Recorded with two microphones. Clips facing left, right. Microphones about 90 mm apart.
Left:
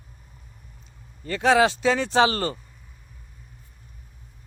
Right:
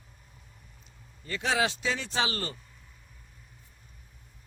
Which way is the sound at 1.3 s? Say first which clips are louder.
Left 9 dB; 55° left (ahead or behind).